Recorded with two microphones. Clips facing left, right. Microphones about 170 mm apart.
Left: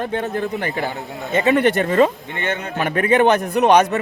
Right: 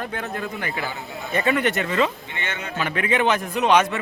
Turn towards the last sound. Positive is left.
turn(degrees=40)  # may be behind; listen again after turning